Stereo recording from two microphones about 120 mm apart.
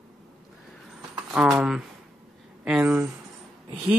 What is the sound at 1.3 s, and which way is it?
Speech, 5° right (ahead or behind).